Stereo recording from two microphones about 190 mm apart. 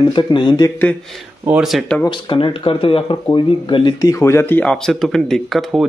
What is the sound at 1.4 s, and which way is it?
Speech, 5° right (ahead or behind).